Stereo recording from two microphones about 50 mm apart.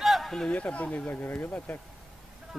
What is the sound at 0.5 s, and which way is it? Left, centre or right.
Speech, left.